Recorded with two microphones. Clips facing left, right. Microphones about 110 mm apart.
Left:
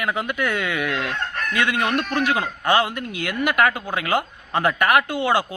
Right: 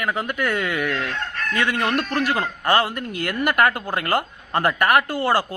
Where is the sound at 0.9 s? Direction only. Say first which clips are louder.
Even; 15° left (ahead or behind).